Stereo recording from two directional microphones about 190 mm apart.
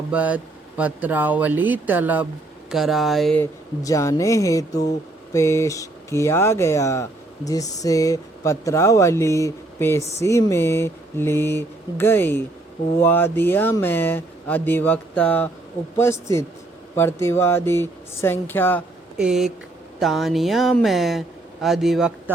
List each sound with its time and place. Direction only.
0.1 s speech: 5° right (ahead or behind)
3.8 s speech: 15° left (ahead or behind)
16.9 s speech: 10° left (ahead or behind)
19.1 s speech: 5° right (ahead or behind)